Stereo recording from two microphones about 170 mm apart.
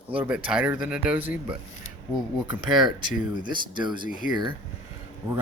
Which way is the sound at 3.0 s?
50° left (ahead or behind).